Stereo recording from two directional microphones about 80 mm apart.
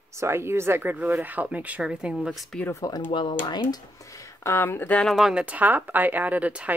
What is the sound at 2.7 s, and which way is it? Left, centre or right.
Speech, left.